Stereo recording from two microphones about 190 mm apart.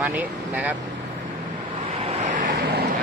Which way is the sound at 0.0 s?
10° right (ahead or behind).